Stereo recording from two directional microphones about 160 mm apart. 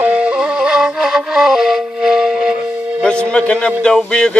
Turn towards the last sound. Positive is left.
turn(degrees=5)  # may be behind; listen again after turning